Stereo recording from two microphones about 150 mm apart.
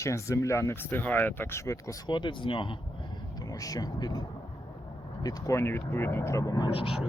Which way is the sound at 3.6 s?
25° left (ahead or behind).